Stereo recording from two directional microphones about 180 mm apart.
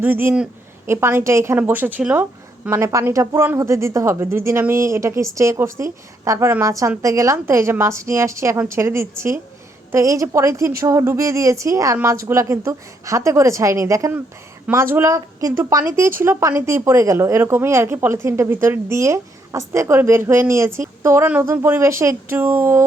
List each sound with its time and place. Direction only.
0.0 s speech: 10° right (ahead or behind)